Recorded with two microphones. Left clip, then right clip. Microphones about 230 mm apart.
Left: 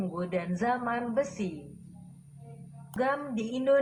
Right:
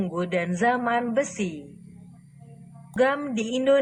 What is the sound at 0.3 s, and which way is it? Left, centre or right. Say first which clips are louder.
Speech: right 7 dB; right.